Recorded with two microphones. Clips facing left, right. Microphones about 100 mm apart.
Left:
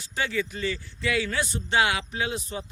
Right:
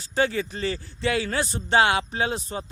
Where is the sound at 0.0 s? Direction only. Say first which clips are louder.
Right 5 dB; 35° right (ahead or behind).